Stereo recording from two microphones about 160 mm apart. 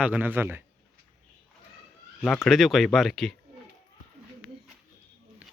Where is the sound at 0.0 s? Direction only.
10° right (ahead or behind).